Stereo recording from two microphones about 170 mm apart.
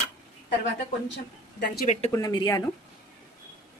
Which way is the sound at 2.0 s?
20° left (ahead or behind).